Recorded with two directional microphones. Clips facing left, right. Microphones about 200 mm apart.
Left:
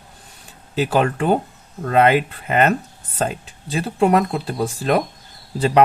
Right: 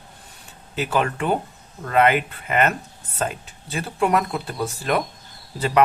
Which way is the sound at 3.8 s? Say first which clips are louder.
Left 4 dB; 30° left (ahead or behind).